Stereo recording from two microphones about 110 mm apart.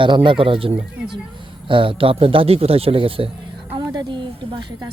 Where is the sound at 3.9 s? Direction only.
40° right (ahead or behind).